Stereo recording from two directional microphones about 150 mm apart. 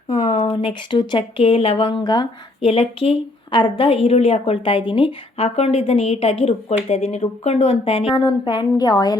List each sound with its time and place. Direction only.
0.1 s a woman's voice: 45° left (ahead or behind); by 9.1 s 25° left (ahead or behind)